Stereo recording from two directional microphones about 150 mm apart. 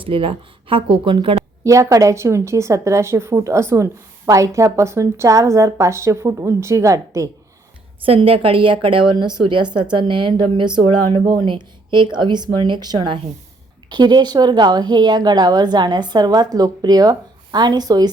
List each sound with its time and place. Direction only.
0.0 s speech: 35° right (ahead or behind)
1.6 s a woman's voice: 20° right (ahead or behind)
8.0 s a woman's voice: 40° right (ahead or behind)